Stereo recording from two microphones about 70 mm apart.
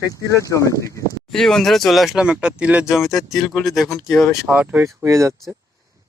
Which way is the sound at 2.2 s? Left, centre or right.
Centre.